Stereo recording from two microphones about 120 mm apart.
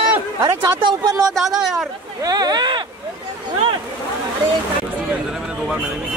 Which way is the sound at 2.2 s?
35° right (ahead or behind).